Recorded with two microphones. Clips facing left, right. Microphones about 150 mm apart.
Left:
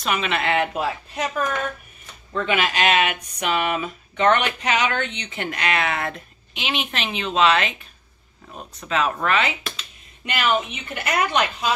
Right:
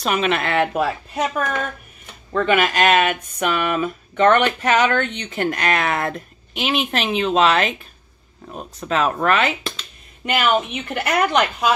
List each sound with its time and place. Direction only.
0.0 s speech: 40° right (ahead or behind)
2.3 s speech: 50° right (ahead or behind)
8.7 s speech: 45° right (ahead or behind)
10.2 s a woman's voice: 60° right (ahead or behind)